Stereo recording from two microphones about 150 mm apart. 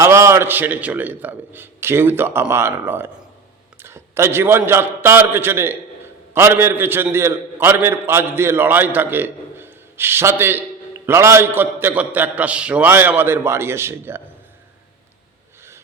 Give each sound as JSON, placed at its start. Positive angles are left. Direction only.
{"t": 0.0, "sound": "a man's voice", "side_deg": -20}